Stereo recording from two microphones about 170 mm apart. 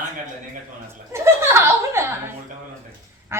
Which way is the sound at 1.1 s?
15° right (ahead or behind).